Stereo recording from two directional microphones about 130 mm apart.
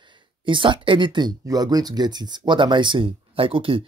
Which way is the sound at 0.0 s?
40° right (ahead or behind).